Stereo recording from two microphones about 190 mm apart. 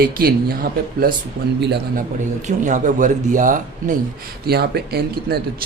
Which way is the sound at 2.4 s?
40° right (ahead or behind).